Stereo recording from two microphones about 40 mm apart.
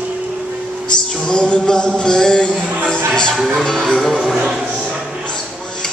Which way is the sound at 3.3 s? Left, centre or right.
Centre.